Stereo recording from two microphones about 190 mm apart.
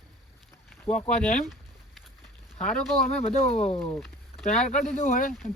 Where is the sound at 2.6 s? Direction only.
5° left (ahead or behind).